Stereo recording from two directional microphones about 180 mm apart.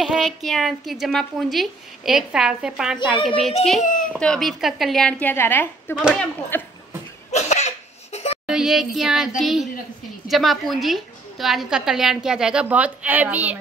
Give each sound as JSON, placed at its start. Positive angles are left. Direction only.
{"t": 0.0, "sound": "a woman's voice", "side_deg": 0}
{"t": 3.8, "sound": "a child's voice", "side_deg": 45}
{"t": 4.1, "sound": "a woman's voice", "side_deg": 5}
{"t": 7.2, "sound": "cough", "side_deg": 40}
{"t": 8.5, "sound": "a woman's voice", "side_deg": -5}